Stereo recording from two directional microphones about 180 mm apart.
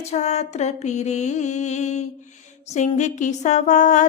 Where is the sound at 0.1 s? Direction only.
40° left (ahead or behind).